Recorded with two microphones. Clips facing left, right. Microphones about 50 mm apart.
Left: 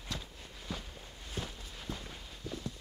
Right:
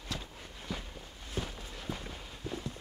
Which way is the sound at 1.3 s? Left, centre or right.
Centre.